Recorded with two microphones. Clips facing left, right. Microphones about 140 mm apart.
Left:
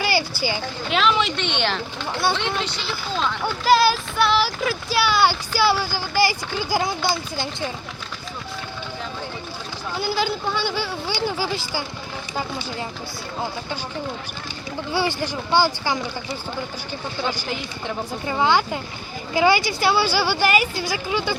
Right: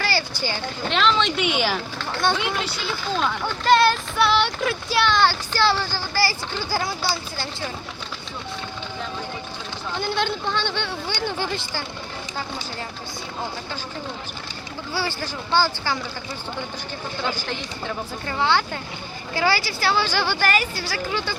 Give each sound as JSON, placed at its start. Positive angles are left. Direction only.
{"t": 0.0, "sound": "speech", "side_deg": 15}
{"t": 1.4, "sound": "speech", "side_deg": -5}
{"t": 3.4, "sound": "speech", "side_deg": 5}
{"t": 10.0, "sound": "speech", "side_deg": 5}
{"t": 14.9, "sound": "speech", "side_deg": 15}
{"t": 17.2, "sound": "speech", "side_deg": 15}